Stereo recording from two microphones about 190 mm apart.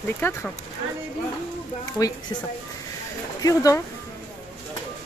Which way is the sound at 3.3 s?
20° left (ahead or behind).